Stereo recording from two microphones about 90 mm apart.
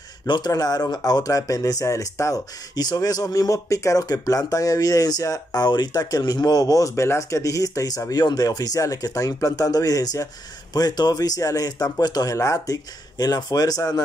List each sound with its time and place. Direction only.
0.5 s speech: 45° left (ahead or behind)
12.4 s speech: 35° left (ahead or behind)
13.2 s speech: 45° left (ahead or behind)